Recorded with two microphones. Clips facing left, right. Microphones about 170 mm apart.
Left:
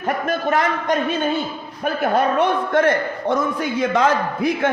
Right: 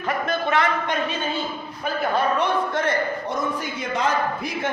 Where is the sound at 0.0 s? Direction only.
40° left (ahead or behind).